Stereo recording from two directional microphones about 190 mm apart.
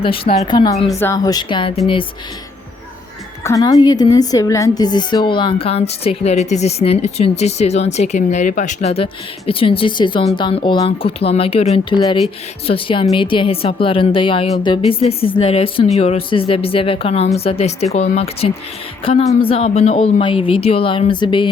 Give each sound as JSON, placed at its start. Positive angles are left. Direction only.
{"t": 0.4, "sound": "a woman's voice", "side_deg": 20}
{"t": 3.4, "sound": "a woman's voice", "side_deg": 20}